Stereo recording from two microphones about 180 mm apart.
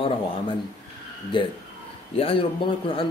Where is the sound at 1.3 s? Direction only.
25° left (ahead or behind).